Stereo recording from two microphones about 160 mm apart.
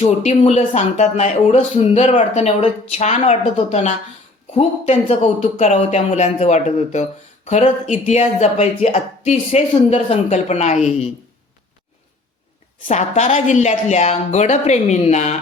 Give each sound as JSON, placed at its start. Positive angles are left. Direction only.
{"t": 0.0, "sound": "speech", "side_deg": 45}
{"t": 12.9, "sound": "speech", "side_deg": 45}